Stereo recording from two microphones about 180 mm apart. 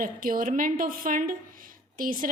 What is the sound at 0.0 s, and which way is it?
A woman's voice, 50° right (ahead or behind).